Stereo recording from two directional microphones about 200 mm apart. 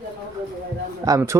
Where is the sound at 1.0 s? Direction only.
15° right (ahead or behind).